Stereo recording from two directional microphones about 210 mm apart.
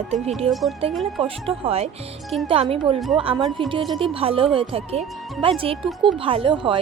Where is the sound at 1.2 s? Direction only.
25° right (ahead or behind).